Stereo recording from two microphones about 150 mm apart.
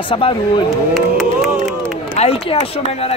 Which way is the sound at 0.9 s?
Centre (ahead or behind).